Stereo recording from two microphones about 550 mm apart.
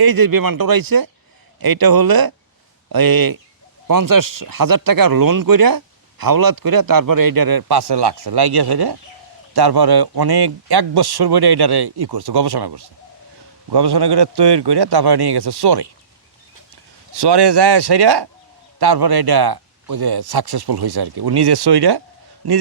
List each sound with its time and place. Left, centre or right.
0.0 s speech: right
17.2 s speech: right